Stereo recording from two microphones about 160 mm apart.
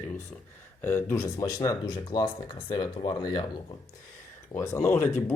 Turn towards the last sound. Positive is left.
turn(degrees=15)  # may be behind; listen again after turning